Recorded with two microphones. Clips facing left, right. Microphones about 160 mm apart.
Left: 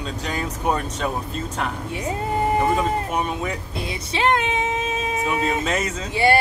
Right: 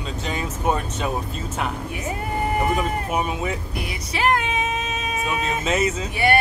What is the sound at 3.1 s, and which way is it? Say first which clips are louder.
Speech: even; 5° right (ahead or behind).